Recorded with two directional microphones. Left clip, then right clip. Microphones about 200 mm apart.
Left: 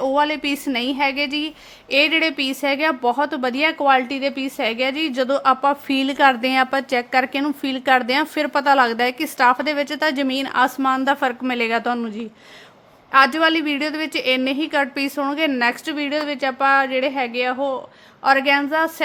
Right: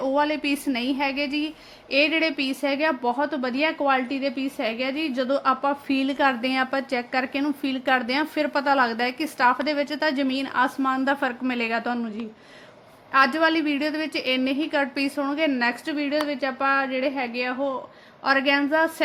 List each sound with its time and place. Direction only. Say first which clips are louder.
0.0 s a woman's voice: left 4 dB; 35° left (ahead or behind)
13.1 s a woman's voice: left 4 dB; 40° left (ahead or behind)